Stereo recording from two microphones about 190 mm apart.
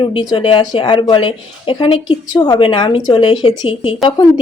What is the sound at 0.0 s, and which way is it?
A woman's voice, 25° left (ahead or behind).